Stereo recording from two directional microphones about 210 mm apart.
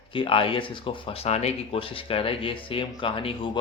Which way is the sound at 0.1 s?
25° left (ahead or behind).